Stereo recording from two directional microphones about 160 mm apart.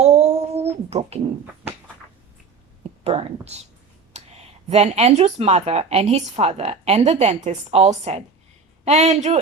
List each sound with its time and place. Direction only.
0.0 s a sound: 40° right (ahead or behind)
3.0 s a woman's voice: 40° right (ahead or behind)
4.1 s clicking: 45° right (ahead or behind)
4.7 s a woman's voice: 40° right (ahead or behind)